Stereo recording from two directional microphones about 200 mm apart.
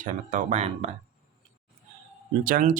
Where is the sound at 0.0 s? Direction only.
40° right (ahead or behind).